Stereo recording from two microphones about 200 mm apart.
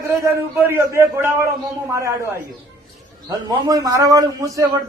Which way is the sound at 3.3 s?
20° right (ahead or behind).